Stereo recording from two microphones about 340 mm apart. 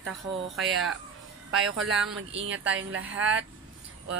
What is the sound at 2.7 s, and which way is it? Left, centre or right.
Speech, right.